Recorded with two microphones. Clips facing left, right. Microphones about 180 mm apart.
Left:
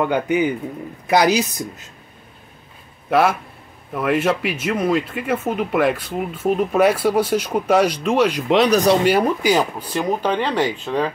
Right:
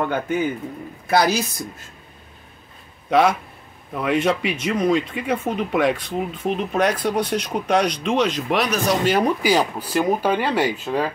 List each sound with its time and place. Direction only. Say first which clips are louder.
0.0 s speech: left 4 dB; 15° left (ahead or behind)
3.1 s speech: even; 5° left (ahead or behind)
8.6 s speech: left 6 dB; 35° left (ahead or behind)
9.4 s speech: left 1 dB; centre (ahead or behind)